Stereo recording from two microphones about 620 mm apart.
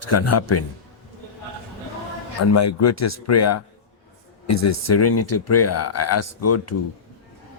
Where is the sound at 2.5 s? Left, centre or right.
Left.